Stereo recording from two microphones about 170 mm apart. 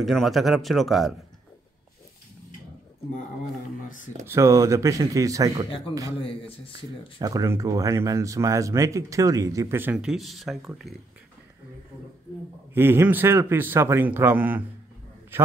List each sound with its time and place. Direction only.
0.0 s speech: centre (ahead or behind)
4.3 s speech: 20° right (ahead or behind)
6.2 s speech: 30° left (ahead or behind)
6.7 s speech: 20° right (ahead or behind); by 10.6 s centre (ahead or behind)
12.7 s a man's voice: 15° right (ahead or behind)